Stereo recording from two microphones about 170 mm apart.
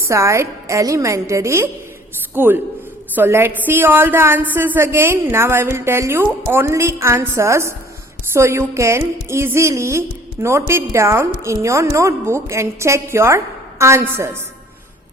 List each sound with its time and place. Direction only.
0.1 s a woman's voice: 15° right (ahead or behind)